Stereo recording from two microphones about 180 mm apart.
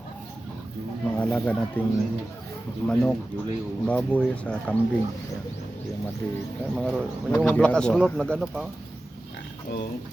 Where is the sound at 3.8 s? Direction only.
10° left (ahead or behind).